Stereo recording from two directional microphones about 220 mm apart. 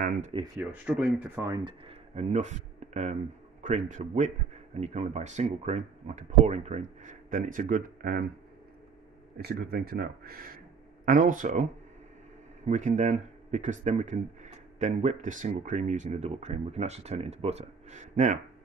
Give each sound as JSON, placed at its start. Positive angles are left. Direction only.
{"t": 0.6, "sound": "speech", "side_deg": -5}
{"t": 9.4, "sound": "speech", "side_deg": -45}